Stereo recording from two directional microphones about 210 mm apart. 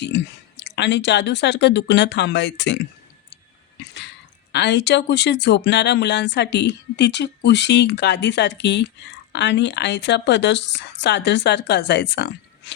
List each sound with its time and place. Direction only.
0.0 s speech: 55° left (ahead or behind)
4.5 s speech: 55° left (ahead or behind)